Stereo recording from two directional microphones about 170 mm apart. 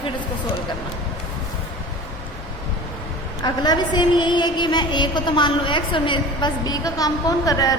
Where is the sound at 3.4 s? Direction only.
25° left (ahead or behind).